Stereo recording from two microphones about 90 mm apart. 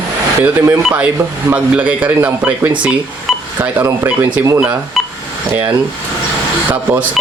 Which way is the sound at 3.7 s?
30° right (ahead or behind).